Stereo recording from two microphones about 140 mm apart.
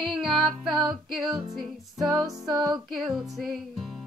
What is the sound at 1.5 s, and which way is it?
Music, 30° right (ahead or behind).